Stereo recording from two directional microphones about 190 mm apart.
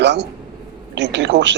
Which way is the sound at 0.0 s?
65° right (ahead or behind).